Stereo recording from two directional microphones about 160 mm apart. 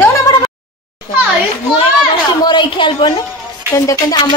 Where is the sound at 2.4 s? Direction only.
30° left (ahead or behind).